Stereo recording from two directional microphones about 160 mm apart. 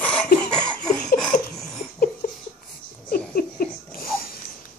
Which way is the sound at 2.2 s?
60° left (ahead or behind).